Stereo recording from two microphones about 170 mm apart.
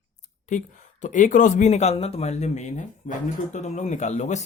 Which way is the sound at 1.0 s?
50° left (ahead or behind).